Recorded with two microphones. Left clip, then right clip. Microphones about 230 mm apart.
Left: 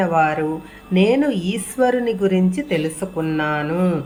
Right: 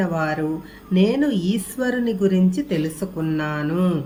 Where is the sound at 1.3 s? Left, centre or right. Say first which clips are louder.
Left 1 dB; centre.